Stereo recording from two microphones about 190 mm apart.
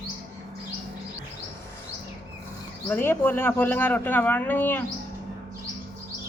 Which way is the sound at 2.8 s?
10° left (ahead or behind).